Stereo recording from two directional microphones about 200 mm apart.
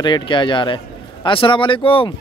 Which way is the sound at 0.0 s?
25° left (ahead or behind).